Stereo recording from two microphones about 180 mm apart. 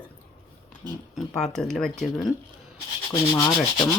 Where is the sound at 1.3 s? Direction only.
5° left (ahead or behind).